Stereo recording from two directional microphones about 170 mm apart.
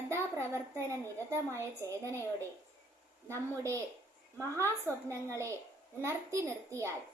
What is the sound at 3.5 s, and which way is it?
A woman's voice, 15° right (ahead or behind).